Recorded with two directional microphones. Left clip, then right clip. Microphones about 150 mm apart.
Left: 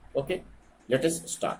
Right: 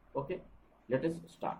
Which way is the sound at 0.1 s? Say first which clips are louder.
Left 8 dB; 5° left (ahead or behind).